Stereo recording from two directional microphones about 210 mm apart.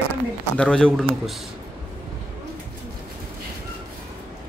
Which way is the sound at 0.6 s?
5° left (ahead or behind).